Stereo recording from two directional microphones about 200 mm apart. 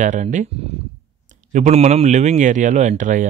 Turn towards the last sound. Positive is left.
turn(degrees=-40)  # may be behind; listen again after turning